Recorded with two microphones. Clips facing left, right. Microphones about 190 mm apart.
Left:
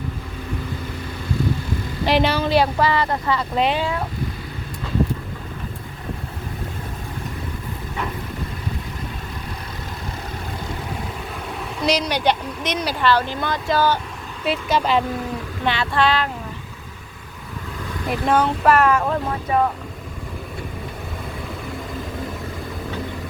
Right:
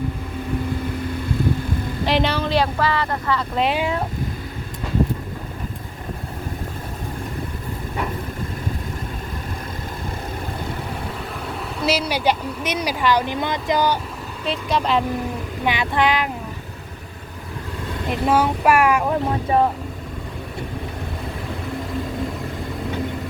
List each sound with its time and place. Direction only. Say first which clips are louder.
2.0 s speech: left 2 dB; 5° left (ahead or behind)
3.6 s speech: even; 5° right (ahead or behind)
11.8 s speech: left 1 dB; 5° right (ahead or behind)
14.4 s speech: left 2 dB; 5° left (ahead or behind)
15.6 s speech: even; 15° right (ahead or behind)
18.1 s speech: even; 5° right (ahead or behind)
19.5 s speech: right 1 dB; 30° right (ahead or behind)